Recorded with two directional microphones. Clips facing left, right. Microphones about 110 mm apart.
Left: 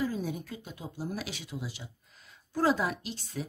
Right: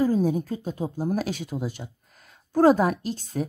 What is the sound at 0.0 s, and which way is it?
Speech, 40° right (ahead or behind).